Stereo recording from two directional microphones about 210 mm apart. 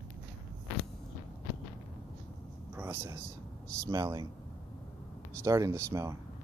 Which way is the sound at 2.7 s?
10° right (ahead or behind).